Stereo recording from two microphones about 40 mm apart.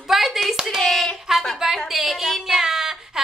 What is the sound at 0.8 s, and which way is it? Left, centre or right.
Speech, centre.